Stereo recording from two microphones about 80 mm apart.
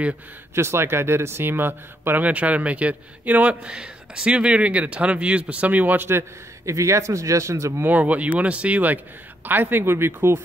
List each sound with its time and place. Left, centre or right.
0.6 s speech: right
7.8 s speech: centre